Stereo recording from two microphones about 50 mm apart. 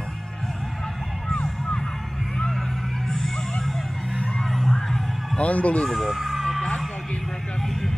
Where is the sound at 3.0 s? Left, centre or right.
Centre.